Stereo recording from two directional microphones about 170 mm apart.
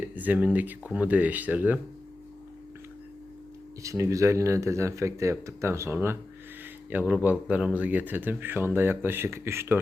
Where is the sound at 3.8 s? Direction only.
20° right (ahead or behind).